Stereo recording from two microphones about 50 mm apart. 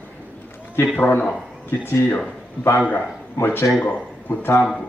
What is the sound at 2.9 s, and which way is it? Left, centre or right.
A man's voice, left.